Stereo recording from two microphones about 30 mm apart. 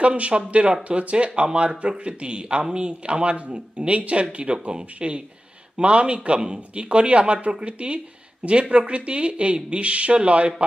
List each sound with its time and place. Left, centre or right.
0.0 s a man's voice: right
2.9 s speech: right